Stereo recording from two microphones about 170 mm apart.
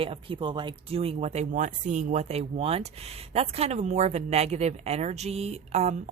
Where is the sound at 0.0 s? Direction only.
30° right (ahead or behind).